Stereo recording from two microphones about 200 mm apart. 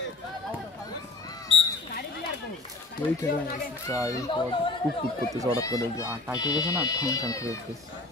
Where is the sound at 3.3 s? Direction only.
50° left (ahead or behind).